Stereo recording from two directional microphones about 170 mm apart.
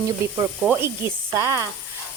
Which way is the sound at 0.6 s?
10° right (ahead or behind).